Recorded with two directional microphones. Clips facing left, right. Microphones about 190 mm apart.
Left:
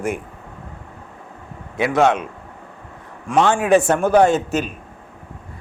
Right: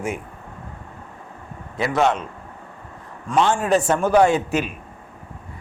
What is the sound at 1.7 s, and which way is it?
Speech, 65° left (ahead or behind).